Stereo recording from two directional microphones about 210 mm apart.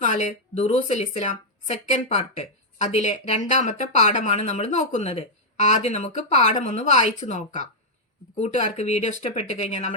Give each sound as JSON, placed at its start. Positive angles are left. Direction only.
{"t": 0.0, "sound": "speech", "side_deg": 35}